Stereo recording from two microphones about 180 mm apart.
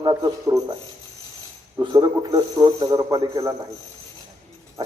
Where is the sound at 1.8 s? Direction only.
20° right (ahead or behind).